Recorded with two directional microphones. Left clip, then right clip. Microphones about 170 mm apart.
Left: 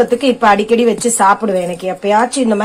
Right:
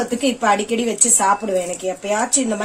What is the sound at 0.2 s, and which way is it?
Speech, 35° left (ahead or behind).